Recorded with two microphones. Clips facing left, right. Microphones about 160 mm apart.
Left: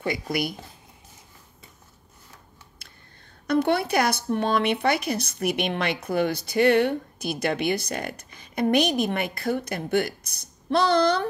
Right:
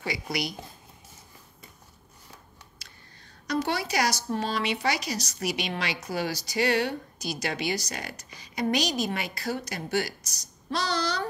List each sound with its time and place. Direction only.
0.0 s speech: 50° left (ahead or behind)
2.8 s whispering: 55° left (ahead or behind)
3.4 s speech: 55° left (ahead or behind)